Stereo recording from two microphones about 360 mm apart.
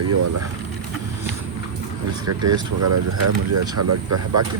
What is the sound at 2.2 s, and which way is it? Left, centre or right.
Speech, right.